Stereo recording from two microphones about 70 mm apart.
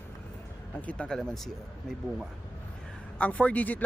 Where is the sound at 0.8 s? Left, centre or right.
Centre.